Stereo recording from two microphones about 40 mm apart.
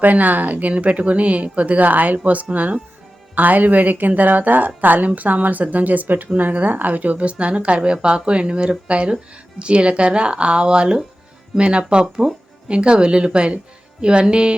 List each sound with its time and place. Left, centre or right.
0.0 s speech: right